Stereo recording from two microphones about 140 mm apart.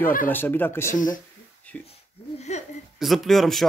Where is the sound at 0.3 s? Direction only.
15° left (ahead or behind).